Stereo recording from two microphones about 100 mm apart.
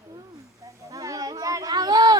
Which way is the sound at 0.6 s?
35° right (ahead or behind).